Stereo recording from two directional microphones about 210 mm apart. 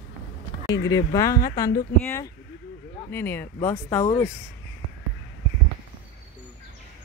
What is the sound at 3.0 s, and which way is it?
Speech, 10° left (ahead or behind).